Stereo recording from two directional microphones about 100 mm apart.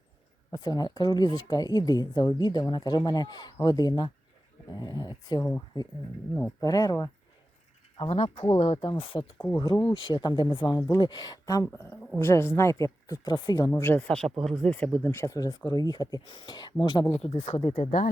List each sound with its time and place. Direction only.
0.5 s speech: 40° left (ahead or behind)
5.4 s speech: 25° left (ahead or behind)
6.6 s speech: 40° left (ahead or behind)
7.9 s speech: 75° left (ahead or behind)
8.4 s speech: 70° left (ahead or behind)
9.8 s speech: 50° left (ahead or behind)
13.7 s speech: 25° left (ahead or behind)
14.1 s speech: 5° left (ahead or behind); by 17.2 s 50° left (ahead or behind)
17.2 s speech: 85° left